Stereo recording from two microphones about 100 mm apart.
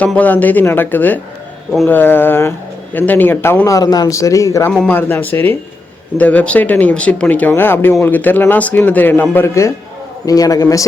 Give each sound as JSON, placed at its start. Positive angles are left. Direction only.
{"t": 0.2, "sound": "a man's voice", "side_deg": 15}
{"t": 3.7, "sound": "speech", "side_deg": 40}
{"t": 4.7, "sound": "speech", "side_deg": 5}
{"t": 4.9, "sound": "a man's voice", "side_deg": 20}
{"t": 10.2, "sound": "speech", "side_deg": 35}